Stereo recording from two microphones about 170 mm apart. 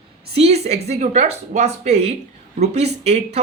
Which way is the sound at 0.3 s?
40° right (ahead or behind).